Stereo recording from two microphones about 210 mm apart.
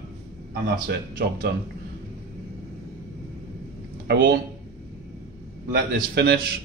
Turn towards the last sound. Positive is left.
turn(degrees=-55)  # may be behind; listen again after turning